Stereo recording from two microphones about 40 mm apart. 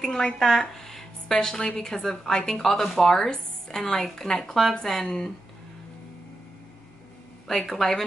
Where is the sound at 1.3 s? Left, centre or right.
Centre.